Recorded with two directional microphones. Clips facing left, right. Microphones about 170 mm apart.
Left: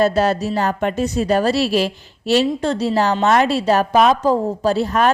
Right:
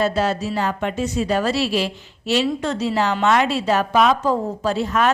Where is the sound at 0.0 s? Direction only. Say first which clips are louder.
Left 4 dB; 40° left (ahead or behind).